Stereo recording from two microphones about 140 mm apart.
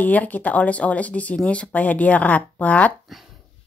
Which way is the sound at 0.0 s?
10° left (ahead or behind).